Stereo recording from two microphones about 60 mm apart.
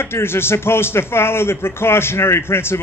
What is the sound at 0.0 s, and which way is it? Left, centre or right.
A man's voice, left.